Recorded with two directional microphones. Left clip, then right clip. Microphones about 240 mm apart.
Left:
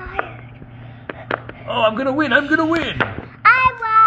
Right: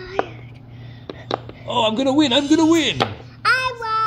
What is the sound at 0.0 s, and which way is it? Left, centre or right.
Whispering, right.